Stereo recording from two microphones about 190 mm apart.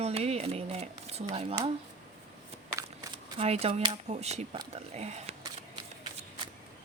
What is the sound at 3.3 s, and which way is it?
Speech, 30° right (ahead or behind).